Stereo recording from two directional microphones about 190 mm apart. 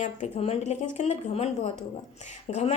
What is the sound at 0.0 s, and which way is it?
A woman's voice, 35° left (ahead or behind).